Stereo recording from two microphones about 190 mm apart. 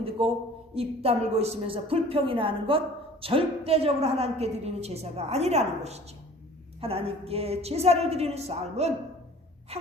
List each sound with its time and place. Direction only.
0.0 s a man's voice: 30° right (ahead or behind)